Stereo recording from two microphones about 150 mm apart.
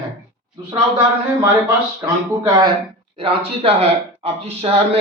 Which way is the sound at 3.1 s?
40° right (ahead or behind).